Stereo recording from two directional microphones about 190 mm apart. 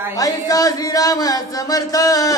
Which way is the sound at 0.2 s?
20° left (ahead or behind).